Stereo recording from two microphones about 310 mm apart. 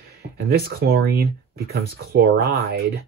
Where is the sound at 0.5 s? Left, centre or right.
Right.